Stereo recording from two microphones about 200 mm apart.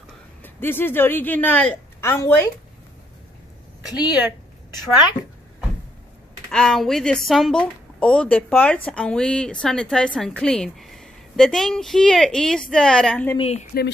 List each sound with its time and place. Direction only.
0.4 s a woman's voice: 10° left (ahead or behind)
3.8 s a woman's voice: 20° left (ahead or behind)
6.5 s speech: 5° left (ahead or behind)
13.4 s speech: 30° left (ahead or behind)